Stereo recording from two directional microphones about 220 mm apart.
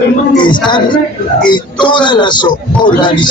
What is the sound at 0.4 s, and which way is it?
Speech, 20° left (ahead or behind).